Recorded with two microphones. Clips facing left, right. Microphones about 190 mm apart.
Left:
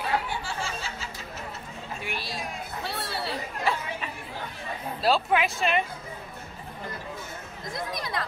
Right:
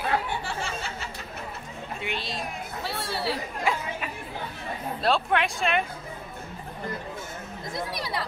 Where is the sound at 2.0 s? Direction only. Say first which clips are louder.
Right 3 dB; 20° right (ahead or behind).